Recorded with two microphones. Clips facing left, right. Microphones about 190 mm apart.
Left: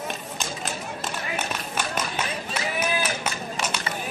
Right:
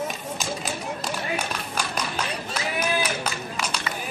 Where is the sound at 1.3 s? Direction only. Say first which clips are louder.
Even; 5° left (ahead or behind).